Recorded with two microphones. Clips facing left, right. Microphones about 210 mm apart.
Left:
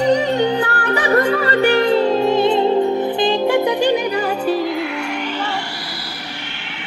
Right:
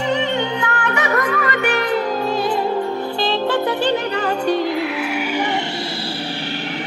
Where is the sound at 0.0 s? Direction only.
40° left (ahead or behind); by 4.8 s centre (ahead or behind).